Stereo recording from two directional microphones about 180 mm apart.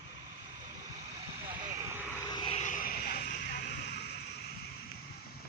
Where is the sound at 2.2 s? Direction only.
25° left (ahead or behind).